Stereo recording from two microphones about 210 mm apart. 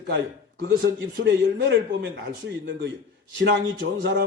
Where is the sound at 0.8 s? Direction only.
60° right (ahead or behind).